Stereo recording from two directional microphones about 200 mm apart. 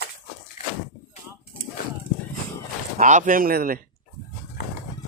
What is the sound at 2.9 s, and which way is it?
Speech, 40° right (ahead or behind).